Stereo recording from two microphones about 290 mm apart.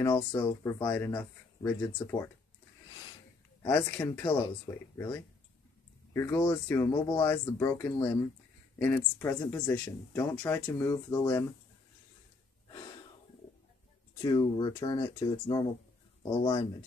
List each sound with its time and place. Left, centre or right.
0.0 s speech: centre
3.6 s speech: centre
14.2 s speech: centre